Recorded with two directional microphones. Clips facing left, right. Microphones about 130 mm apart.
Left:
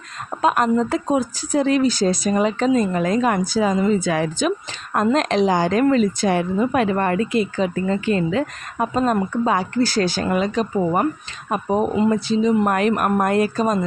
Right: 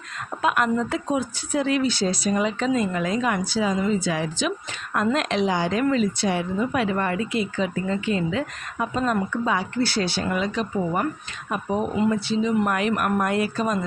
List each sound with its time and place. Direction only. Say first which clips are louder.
0.4 s a woman's voice: left 4 dB; 35° left (ahead or behind); by 4.5 s 50° left (ahead or behind)
5.1 s a woman's voice: left 7 dB; 40° left (ahead or behind)